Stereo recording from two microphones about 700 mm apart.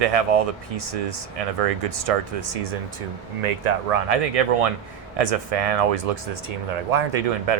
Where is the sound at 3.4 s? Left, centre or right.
Right.